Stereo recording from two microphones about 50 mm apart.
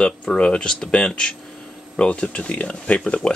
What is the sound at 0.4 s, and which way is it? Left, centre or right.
Speech, left.